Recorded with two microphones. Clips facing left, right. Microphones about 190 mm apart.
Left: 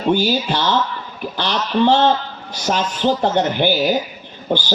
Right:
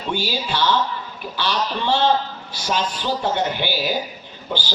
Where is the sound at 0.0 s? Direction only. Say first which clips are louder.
Left 8 dB; 45° left (ahead or behind).